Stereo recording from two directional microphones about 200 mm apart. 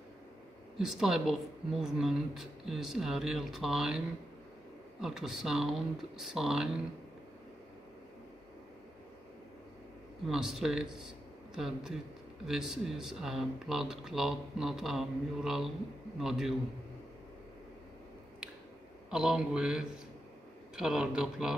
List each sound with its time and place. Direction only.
0.7 s speech: centre (ahead or behind)
5.0 s speech: centre (ahead or behind)
10.2 s a man's voice: centre (ahead or behind)
19.0 s speech: 5° right (ahead or behind)